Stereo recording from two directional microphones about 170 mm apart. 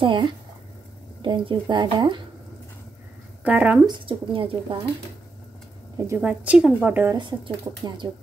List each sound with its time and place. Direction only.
0.0 s speech: 30° right (ahead or behind)
3.4 s a woman's voice: 10° right (ahead or behind)
3.8 s speech: 30° right (ahead or behind)
5.9 s a woman's voice: 15° right (ahead or behind)
7.2 s speech: 25° right (ahead or behind)